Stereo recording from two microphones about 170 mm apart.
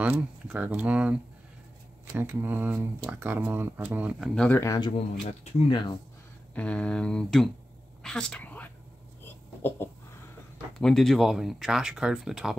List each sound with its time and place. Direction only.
0.0 s speech: 10° right (ahead or behind)
2.1 s speech: 10° right (ahead or behind)
4.4 s speech: 10° left (ahead or behind)
4.7 s speech: 25° left (ahead or behind)
6.5 s a woman's voice: 5° left (ahead or behind)
9.2 s a sound: 10° left (ahead or behind)
10.8 s speech: centre (ahead or behind)